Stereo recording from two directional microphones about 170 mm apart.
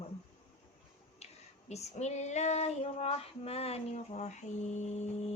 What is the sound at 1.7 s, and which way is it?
Speech, 40° left (ahead or behind).